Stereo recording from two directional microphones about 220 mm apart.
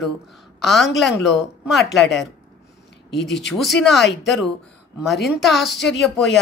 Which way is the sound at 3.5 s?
Centre (ahead or behind).